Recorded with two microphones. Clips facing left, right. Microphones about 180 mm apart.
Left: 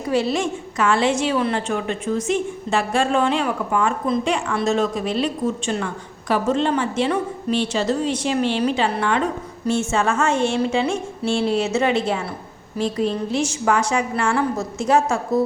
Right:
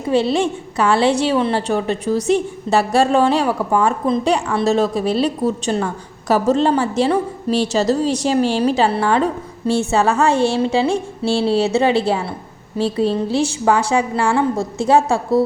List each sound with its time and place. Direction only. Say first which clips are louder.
0.1 s a woman's voice: right 4 dB; 30° right (ahead or behind)